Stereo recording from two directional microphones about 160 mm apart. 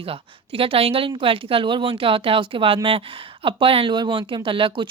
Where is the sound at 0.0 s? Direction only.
35° right (ahead or behind).